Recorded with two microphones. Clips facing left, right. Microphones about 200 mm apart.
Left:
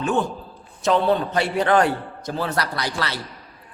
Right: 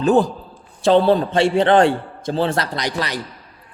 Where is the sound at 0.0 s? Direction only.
35° right (ahead or behind).